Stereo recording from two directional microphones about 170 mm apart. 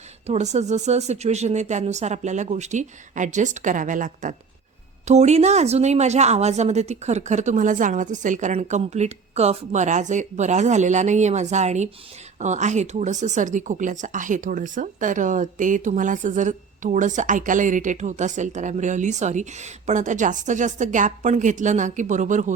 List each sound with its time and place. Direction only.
0.3 s speech: 40° right (ahead or behind)